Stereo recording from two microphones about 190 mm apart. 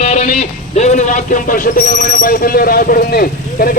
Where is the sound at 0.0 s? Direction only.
35° left (ahead or behind).